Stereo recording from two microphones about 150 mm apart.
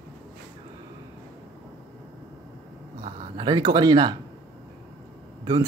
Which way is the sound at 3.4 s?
25° right (ahead or behind).